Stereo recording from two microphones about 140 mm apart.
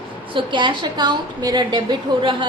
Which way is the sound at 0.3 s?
35° right (ahead or behind).